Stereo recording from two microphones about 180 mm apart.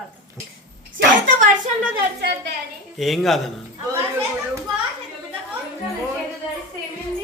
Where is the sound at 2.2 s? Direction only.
70° right (ahead or behind).